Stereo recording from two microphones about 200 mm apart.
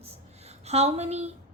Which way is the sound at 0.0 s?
30° right (ahead or behind).